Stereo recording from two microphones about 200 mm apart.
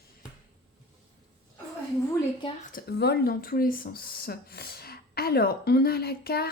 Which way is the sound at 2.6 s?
50° left (ahead or behind).